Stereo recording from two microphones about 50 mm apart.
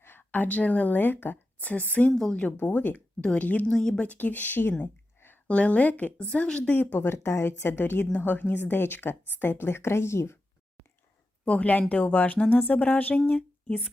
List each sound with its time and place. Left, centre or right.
0.0 s a woman's voice: left
1.7 s a woman's voice: left
3.7 s speech: centre
4.0 s speech: left
4.8 s a sound: left
5.5 s a woman's voice: left
6.7 s speech: left
7.1 s speech: left
7.7 s a woman's voice: left
11.4 s speech: left